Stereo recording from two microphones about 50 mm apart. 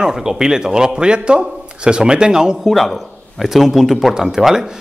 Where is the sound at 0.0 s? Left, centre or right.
Centre.